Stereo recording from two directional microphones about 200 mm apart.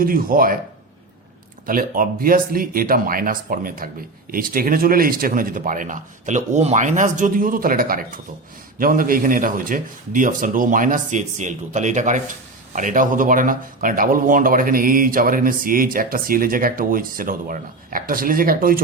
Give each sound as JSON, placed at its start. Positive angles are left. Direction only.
{"t": 0.0, "sound": "speech", "side_deg": -45}
{"t": 1.6, "sound": "speech", "side_deg": -45}